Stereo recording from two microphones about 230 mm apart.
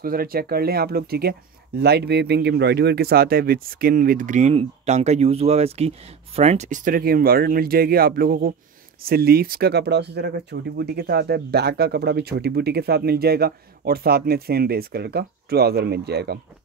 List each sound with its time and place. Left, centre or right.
0.0 s speech: right